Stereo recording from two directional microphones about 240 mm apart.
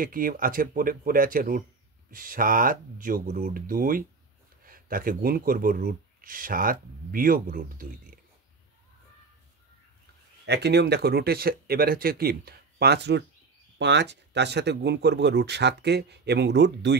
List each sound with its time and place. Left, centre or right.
0.0 s speech: right
10.4 s speech: right